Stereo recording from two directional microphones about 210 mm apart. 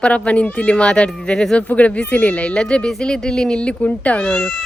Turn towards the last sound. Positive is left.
turn(degrees=0)  # may be behind; listen again after turning